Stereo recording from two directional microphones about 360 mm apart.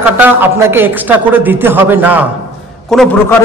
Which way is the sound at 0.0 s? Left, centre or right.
Centre.